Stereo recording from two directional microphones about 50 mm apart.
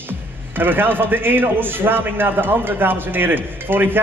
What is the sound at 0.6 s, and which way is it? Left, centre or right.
A man's voice, right.